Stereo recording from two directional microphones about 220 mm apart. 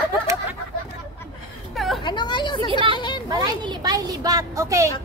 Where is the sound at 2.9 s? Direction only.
20° left (ahead or behind).